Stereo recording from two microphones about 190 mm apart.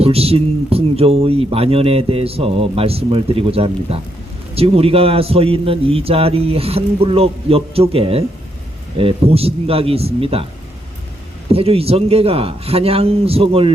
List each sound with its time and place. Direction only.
0.0 s speech: 30° right (ahead or behind)
11.5 s speech: 30° right (ahead or behind)